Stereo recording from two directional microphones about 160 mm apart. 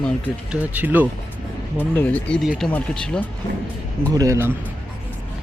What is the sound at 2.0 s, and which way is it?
Speech, 10° left (ahead or behind).